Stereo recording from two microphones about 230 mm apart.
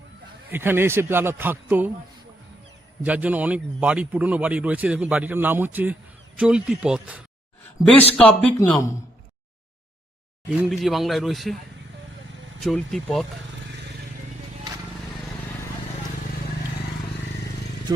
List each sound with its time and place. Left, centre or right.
0.5 s a man's voice: centre
3.0 s a man's voice: centre
10.6 s a man's voice: centre
12.6 s a man's voice: centre